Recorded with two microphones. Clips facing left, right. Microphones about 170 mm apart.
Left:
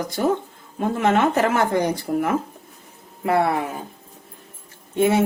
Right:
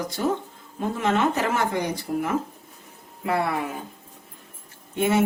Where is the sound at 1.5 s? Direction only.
50° left (ahead or behind).